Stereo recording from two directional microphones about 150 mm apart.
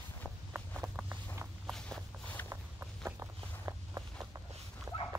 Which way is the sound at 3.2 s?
15° right (ahead or behind).